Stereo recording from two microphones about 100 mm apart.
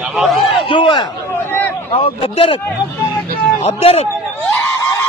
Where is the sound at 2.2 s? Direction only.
65° left (ahead or behind).